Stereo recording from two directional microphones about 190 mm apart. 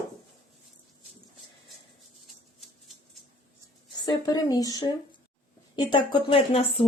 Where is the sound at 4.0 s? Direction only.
20° left (ahead or behind).